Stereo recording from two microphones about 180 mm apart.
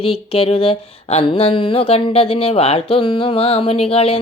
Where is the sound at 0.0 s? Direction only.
30° left (ahead or behind).